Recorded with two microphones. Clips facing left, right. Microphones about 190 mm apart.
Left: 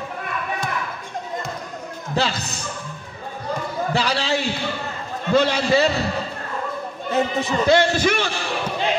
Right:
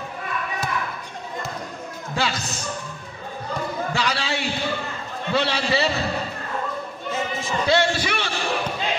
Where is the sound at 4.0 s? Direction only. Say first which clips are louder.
Left 4 dB; 35° left (ahead or behind).